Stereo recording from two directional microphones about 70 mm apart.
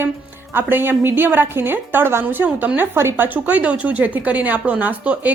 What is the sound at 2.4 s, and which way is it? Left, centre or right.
Speech, centre.